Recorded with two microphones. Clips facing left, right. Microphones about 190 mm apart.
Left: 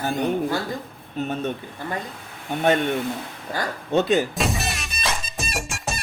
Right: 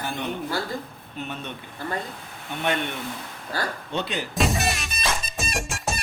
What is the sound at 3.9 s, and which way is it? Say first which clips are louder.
Speech: left 12 dB; 45° left (ahead or behind).